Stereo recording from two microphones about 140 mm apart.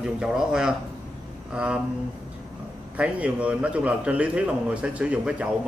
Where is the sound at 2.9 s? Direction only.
10° right (ahead or behind).